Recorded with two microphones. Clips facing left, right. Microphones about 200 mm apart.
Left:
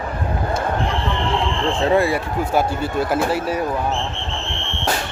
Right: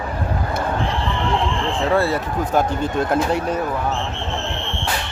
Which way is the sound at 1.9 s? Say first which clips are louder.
Left 1 dB; 15° left (ahead or behind).